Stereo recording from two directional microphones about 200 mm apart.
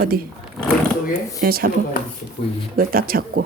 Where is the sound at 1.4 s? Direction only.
50° right (ahead or behind).